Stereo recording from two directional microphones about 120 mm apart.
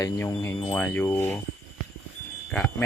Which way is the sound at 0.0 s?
30° left (ahead or behind).